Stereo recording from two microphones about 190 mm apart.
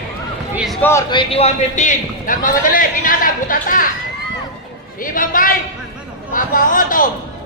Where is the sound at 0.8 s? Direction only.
10° left (ahead or behind).